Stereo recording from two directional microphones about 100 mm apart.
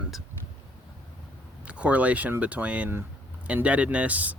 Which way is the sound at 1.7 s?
15° right (ahead or behind).